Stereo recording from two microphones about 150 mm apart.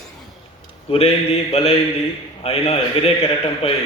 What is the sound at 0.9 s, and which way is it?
A man's voice, 40° left (ahead or behind).